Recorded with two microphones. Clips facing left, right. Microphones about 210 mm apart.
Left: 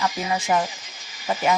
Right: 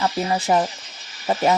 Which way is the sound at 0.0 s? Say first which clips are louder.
Right 3 dB; 35° right (ahead or behind).